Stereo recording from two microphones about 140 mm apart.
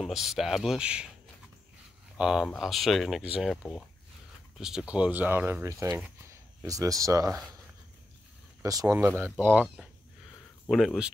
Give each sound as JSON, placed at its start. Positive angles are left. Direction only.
{"t": 0.0, "sound": "speech", "side_deg": 0}
{"t": 2.1, "sound": "speech", "side_deg": -5}
{"t": 4.6, "sound": "speech", "side_deg": -5}
{"t": 8.6, "sound": "speech", "side_deg": -25}
{"t": 8.9, "sound": "speech", "side_deg": -15}
{"t": 10.7, "sound": "speech", "side_deg": 0}